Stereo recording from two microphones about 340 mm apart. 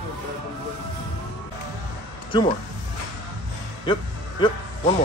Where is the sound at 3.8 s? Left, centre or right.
Centre.